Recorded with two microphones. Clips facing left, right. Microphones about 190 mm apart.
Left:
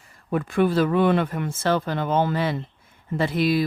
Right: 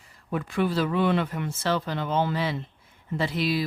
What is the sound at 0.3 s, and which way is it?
Speech, 50° left (ahead or behind).